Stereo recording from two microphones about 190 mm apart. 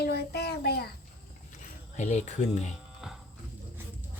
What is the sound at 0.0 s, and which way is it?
Child singing, 60° left (ahead or behind).